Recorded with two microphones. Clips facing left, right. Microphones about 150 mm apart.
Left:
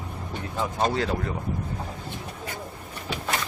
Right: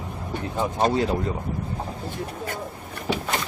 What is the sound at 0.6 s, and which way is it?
Speech, 20° right (ahead or behind).